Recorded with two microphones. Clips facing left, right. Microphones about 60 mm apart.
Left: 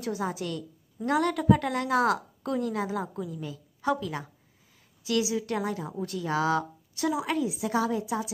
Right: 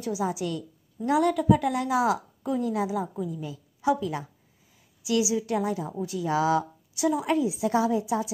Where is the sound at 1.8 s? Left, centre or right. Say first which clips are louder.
Right 1 dB; centre.